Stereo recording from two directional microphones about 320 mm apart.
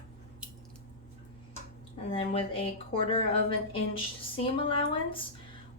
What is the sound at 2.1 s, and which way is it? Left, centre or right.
Speech, centre.